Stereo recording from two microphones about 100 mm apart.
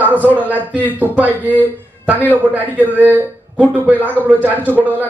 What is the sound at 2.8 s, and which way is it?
A man's voice, 15° right (ahead or behind).